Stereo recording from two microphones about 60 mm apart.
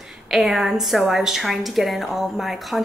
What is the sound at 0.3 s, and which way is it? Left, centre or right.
A woman's voice, centre.